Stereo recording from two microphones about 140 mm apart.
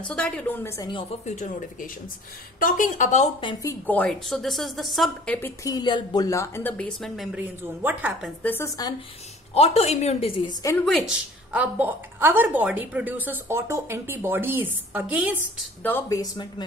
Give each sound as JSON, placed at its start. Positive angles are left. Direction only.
{"t": 0.1, "sound": "a woman's voice", "side_deg": 5}
{"t": 1.2, "sound": "speech", "side_deg": 60}
{"t": 3.6, "sound": "a woman's voice", "side_deg": 10}
{"t": 5.6, "sound": "a woman's voice", "side_deg": 30}
{"t": 6.9, "sound": "a woman's voice", "side_deg": 0}
{"t": 7.3, "sound": "a woman's voice", "side_deg": -10}
{"t": 8.4, "sound": "a woman's voice", "side_deg": 15}
{"t": 9.5, "sound": "a woman's voice", "side_deg": 45}
{"t": 10.9, "sound": "a woman's voice", "side_deg": 0}
{"t": 11.5, "sound": "a woman's voice", "side_deg": -10}
{"t": 16.1, "sound": "a woman's voice", "side_deg": 30}